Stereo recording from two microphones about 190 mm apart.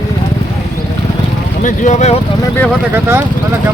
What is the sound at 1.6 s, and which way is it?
Speech, 40° left (ahead or behind).